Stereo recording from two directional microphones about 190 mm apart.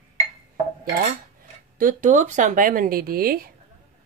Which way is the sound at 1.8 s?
45° right (ahead or behind).